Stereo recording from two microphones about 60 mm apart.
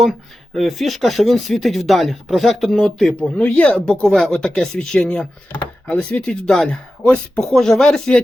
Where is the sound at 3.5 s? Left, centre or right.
Left.